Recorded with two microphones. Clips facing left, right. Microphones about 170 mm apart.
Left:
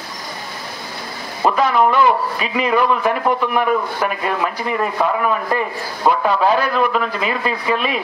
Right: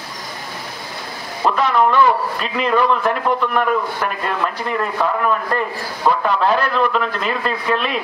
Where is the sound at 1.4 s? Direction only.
5° left (ahead or behind).